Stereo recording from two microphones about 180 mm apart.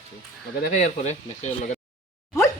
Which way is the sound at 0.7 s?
40° left (ahead or behind).